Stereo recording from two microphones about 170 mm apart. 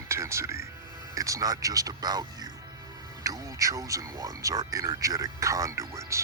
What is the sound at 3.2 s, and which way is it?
Speech, 20° right (ahead or behind).